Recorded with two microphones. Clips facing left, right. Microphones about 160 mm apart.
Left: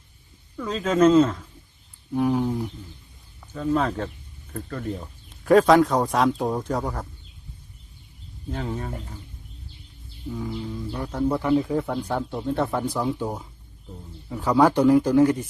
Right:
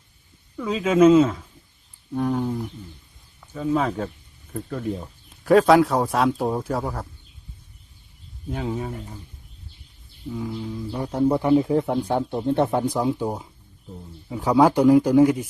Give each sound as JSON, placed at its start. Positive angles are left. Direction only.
{"t": 0.5, "sound": "a man's voice", "side_deg": -5}
{"t": 2.1, "sound": "a sound", "side_deg": 5}
{"t": 3.4, "sound": "speech", "side_deg": -5}
{"t": 8.4, "sound": "a man's voice", "side_deg": -5}
{"t": 10.2, "sound": "speech", "side_deg": 0}
{"t": 10.9, "sound": "a man's voice", "side_deg": -20}